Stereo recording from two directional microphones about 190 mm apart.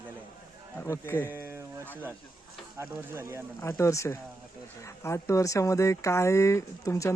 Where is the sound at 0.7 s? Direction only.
15° left (ahead or behind).